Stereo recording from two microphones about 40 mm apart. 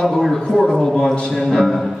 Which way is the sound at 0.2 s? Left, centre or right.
Centre.